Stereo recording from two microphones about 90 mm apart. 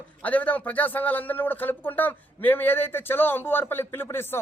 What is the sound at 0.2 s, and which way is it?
Speech, 20° left (ahead or behind).